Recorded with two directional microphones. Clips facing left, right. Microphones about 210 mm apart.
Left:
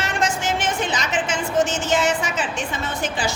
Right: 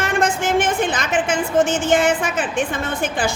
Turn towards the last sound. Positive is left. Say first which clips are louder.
# right 3 dB
turn(degrees=-55)  # may be behind; listen again after turning